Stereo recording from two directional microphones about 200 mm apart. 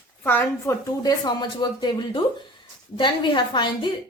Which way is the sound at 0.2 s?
10° left (ahead or behind).